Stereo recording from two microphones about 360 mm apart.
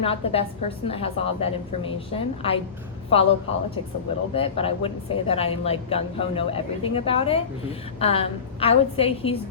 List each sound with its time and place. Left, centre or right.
0.0 s speech: centre
4.4 s speech: centre